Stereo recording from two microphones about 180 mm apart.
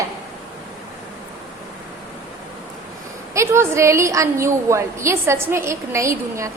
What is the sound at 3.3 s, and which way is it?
A woman's voice, 15° right (ahead or behind).